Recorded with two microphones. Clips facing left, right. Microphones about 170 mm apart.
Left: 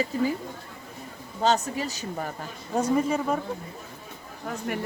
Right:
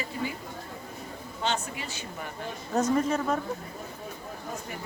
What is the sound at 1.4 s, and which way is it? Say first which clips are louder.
Speech: left 7 dB; 40° left (ahead or behind).